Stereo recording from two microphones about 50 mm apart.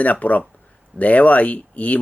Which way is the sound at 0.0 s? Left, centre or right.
Left.